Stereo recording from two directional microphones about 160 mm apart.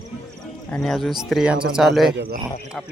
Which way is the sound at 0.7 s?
5° left (ahead or behind).